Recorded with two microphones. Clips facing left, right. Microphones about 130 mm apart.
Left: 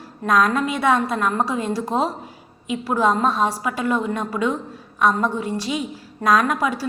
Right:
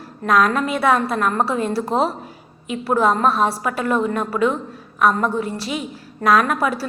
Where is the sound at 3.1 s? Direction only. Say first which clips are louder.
Even; 20° left (ahead or behind).